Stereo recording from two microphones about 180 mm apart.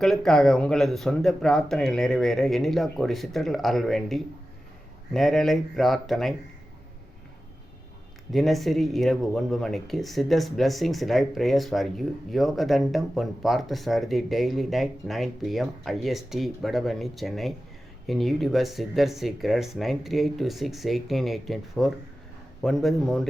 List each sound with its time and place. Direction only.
0.0 s speech: centre (ahead or behind)
8.3 s speech: centre (ahead or behind)